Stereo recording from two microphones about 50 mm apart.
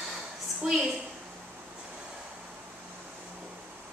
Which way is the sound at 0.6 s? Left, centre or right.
Centre.